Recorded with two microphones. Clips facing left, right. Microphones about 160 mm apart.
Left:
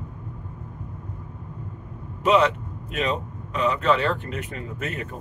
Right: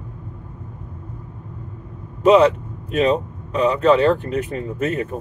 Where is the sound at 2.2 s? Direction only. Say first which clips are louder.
Right 7 dB; 40° right (ahead or behind).